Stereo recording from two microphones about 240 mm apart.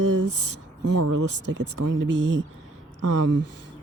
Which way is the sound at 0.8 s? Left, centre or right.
Right.